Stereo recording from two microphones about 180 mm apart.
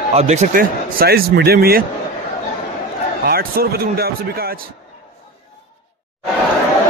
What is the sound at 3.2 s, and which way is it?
Speech, 55° right (ahead or behind).